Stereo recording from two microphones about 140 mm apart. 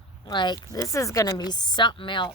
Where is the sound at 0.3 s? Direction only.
30° left (ahead or behind).